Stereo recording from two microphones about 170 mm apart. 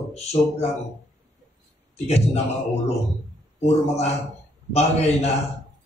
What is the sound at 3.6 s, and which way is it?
A man's voice, 40° left (ahead or behind).